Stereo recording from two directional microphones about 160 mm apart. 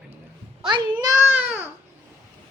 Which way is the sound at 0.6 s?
30° right (ahead or behind).